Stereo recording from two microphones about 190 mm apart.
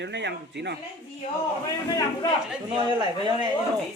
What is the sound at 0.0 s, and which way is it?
Speech, 65° right (ahead or behind).